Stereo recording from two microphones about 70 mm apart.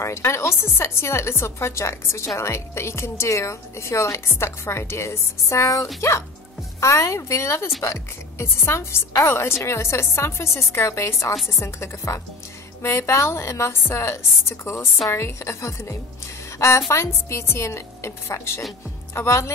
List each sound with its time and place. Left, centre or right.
0.0 s a woman's voice: left